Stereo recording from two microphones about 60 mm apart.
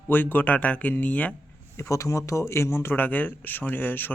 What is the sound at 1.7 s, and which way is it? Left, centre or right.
Speech, left.